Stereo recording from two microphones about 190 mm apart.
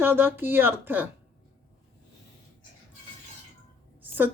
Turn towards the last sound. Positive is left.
turn(degrees=-10)  # may be behind; listen again after turning